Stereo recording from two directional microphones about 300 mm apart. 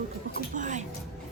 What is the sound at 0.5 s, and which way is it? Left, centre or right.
Speech, right.